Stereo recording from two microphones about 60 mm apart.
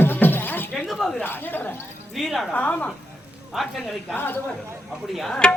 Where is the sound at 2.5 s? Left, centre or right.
Left.